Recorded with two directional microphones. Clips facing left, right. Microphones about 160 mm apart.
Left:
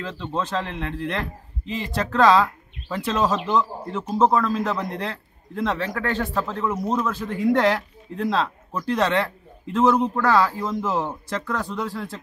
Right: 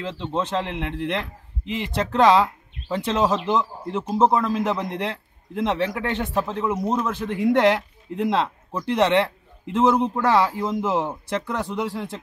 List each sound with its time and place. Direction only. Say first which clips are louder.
0.0 s speech: right 2 dB; 20° right (ahead or behind)